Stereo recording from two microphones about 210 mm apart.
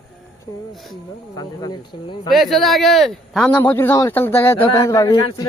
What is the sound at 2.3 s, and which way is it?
Speech, centre (ahead or behind).